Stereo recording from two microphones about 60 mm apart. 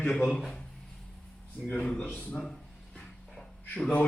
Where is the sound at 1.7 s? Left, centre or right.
Centre.